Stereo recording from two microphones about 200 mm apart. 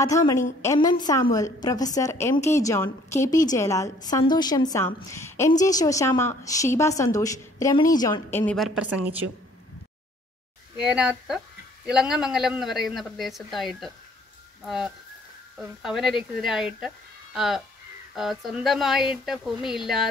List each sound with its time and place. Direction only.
0.0 s a woman's voice: 15° left (ahead or behind); by 9.2 s 5° right (ahead or behind)
10.8 s speech: 5° right (ahead or behind)